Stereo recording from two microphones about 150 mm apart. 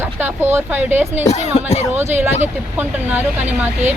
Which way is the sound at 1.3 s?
45° left (ahead or behind).